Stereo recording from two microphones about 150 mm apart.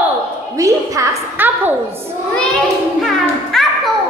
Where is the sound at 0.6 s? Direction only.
20° right (ahead or behind).